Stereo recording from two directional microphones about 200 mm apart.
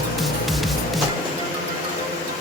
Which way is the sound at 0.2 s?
Centre (ahead or behind).